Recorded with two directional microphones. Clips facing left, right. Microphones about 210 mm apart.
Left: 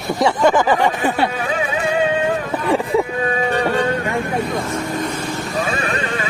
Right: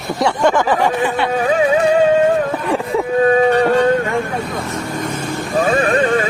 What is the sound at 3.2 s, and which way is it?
Music, 40° right (ahead or behind).